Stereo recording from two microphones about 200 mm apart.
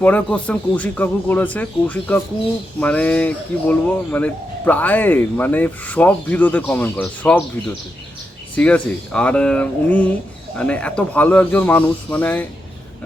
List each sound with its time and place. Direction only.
0.0 s speech: 10° left (ahead or behind)